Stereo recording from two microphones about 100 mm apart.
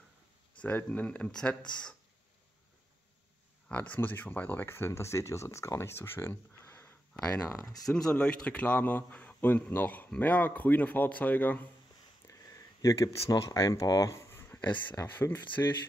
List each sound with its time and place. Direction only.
0.6 s speech: 15° left (ahead or behind)
3.6 s speech: 15° left (ahead or behind)
7.4 s speech: 35° left (ahead or behind)
7.8 s speech: 10° left (ahead or behind)
12.3 s speech: 35° left (ahead or behind)